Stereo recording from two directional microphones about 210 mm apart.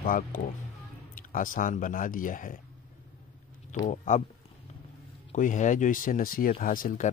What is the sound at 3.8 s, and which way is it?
Speech, 35° left (ahead or behind).